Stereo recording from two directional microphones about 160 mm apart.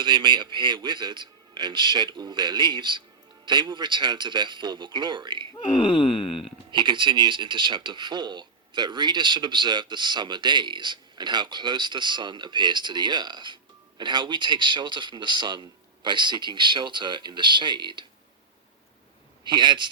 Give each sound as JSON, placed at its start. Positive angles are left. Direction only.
{"t": 0.0, "sound": "speech", "side_deg": -30}
{"t": 5.7, "sound": "wail", "side_deg": 30}
{"t": 6.7, "sound": "speech", "side_deg": -30}
{"t": 19.5, "sound": "speech", "side_deg": -30}